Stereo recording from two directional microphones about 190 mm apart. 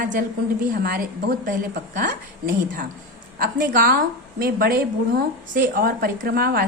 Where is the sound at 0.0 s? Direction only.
45° right (ahead or behind).